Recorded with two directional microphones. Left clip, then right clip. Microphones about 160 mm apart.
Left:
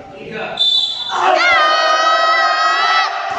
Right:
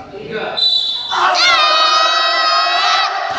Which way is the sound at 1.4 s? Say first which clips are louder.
Right 1 dB; 40° left (ahead or behind).